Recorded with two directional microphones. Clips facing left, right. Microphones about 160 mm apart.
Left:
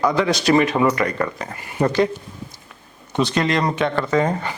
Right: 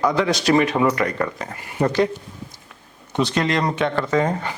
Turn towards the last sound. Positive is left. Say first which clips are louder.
# left 1 dB
turn(degrees=15)  # may be behind; listen again after turning